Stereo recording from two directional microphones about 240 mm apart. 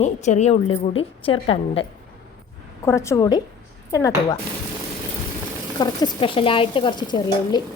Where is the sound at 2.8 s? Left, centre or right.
Centre.